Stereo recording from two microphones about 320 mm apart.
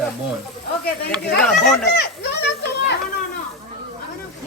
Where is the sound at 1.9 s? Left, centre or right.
Left.